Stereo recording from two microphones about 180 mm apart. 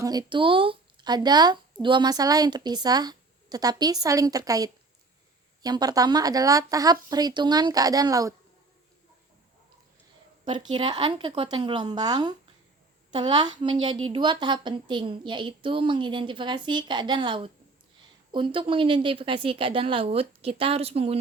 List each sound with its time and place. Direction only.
0.0 s a woman's voice: 20° right (ahead or behind)
10.4 s a woman's voice: 25° right (ahead or behind)